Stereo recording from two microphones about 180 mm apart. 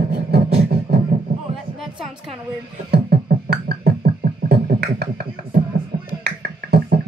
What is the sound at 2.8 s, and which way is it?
Beatboxing, 65° right (ahead or behind).